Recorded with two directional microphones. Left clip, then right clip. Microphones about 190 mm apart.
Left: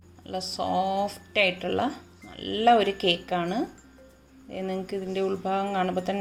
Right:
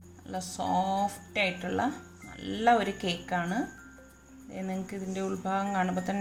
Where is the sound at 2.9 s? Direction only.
5° right (ahead or behind).